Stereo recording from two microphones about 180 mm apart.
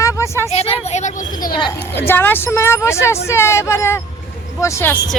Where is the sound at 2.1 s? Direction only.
10° left (ahead or behind).